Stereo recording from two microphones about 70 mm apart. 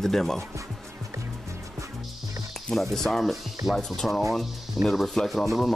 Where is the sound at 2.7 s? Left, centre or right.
Centre.